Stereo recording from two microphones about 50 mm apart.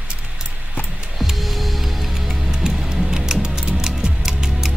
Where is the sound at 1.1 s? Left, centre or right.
Centre.